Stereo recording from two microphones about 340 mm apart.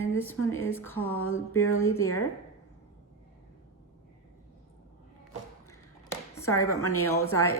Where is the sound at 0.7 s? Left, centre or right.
Centre.